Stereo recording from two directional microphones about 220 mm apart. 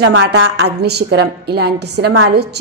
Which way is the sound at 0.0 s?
50° right (ahead or behind).